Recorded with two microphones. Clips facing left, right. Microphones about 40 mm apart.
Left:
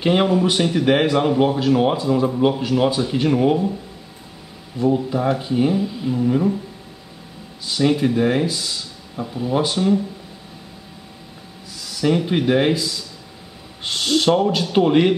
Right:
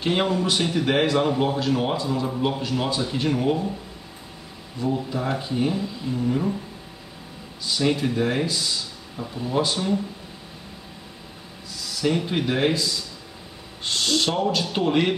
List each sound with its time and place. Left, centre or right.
0.0 s speech: centre
4.7 s speech: centre
7.6 s speech: centre
9.1 s speech: centre
12.0 s speech: centre
12.3 s speech: centre